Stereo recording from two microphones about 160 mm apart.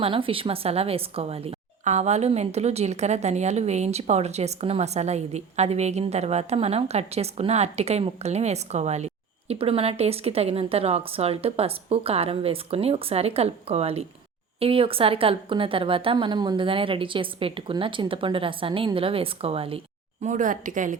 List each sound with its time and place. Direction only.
0.0 s a woman's voice: 35° right (ahead or behind)
20.2 s a woman's voice: 50° right (ahead or behind)